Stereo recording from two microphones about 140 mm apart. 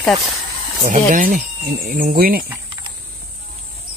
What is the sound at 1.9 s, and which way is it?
Speech, 85° right.